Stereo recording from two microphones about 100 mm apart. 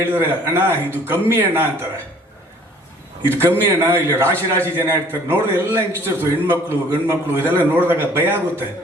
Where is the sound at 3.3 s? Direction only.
25° right (ahead or behind).